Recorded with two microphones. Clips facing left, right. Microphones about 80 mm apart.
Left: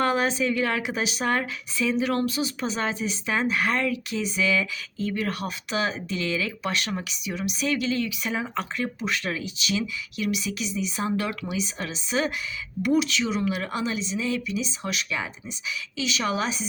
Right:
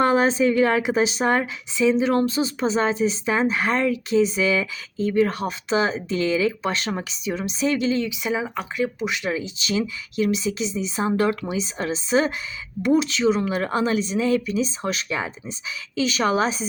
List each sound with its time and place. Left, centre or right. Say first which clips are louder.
0.0 s a woman's voice: right 5 dB; right
9.6 s speech: right 3 dB; right